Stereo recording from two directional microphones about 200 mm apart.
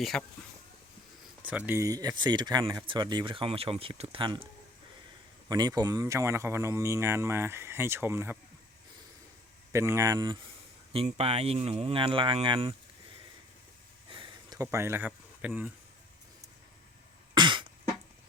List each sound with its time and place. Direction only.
0.0 s speech: centre (ahead or behind)
1.5 s speech: 10° right (ahead or behind); by 4.4 s 25° right (ahead or behind)
5.5 s speech: 20° right (ahead or behind)
9.7 s speech: 15° right (ahead or behind)
10.9 s speech: 30° right (ahead or behind)
14.1 s a sound: 20° right (ahead or behind); by 15.7 s 5° right (ahead or behind)
17.3 s cough: 25° right (ahead or behind)